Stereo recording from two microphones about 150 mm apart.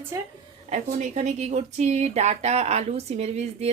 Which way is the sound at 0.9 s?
55° right (ahead or behind).